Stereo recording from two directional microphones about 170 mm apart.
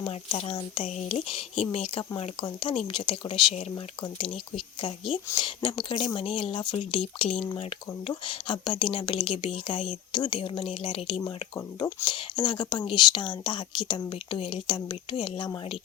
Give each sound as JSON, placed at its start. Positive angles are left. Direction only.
{"t": 0.0, "sound": "speech", "side_deg": 30}
{"t": 0.8, "sound": "speech", "side_deg": 45}
{"t": 4.5, "sound": "speech", "side_deg": 30}